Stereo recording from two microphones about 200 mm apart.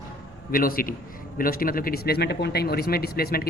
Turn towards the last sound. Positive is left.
turn(degrees=50)  # may be behind; listen again after turning